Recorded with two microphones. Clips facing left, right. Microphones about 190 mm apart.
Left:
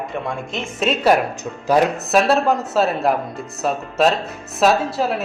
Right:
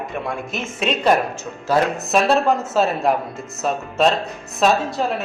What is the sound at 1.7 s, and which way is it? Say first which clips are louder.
Music: left 2 dB; 15° left (ahead or behind).